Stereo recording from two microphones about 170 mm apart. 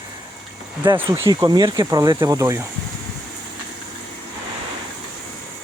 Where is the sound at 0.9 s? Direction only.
15° right (ahead or behind).